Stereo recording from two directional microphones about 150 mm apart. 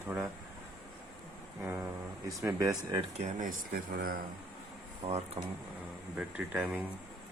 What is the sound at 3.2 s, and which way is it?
Speech, 55° right (ahead or behind).